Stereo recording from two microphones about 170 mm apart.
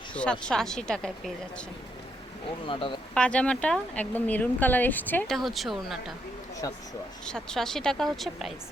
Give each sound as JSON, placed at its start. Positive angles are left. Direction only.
{"t": 0.1, "sound": "speech", "side_deg": 5}
{"t": 2.6, "sound": "speech", "side_deg": 30}
{"t": 3.2, "sound": "speech", "side_deg": 5}
{"t": 7.3, "sound": "speech", "side_deg": 5}